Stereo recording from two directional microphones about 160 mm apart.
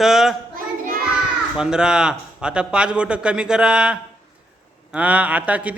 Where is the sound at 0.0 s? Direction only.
Centre (ahead or behind).